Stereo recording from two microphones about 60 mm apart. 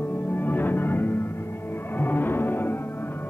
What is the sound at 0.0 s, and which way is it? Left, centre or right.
Music, left.